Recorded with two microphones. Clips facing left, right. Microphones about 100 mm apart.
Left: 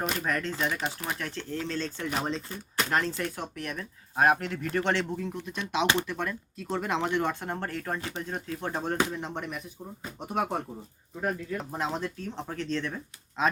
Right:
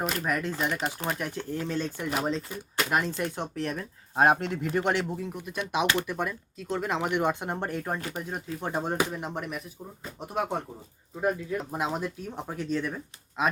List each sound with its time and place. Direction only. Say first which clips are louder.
0.0 s speech: right 1 dB; centre (ahead or behind)
3.2 s speech: right 3 dB; 25° right (ahead or behind)
4.7 s speech: even; 10° right (ahead or behind)
6.6 s speech: even; centre (ahead or behind)
7.0 s speech: right 2 dB; 15° right (ahead or behind)